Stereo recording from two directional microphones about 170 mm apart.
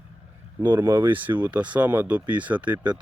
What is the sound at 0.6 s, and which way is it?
Speech, 10° right (ahead or behind).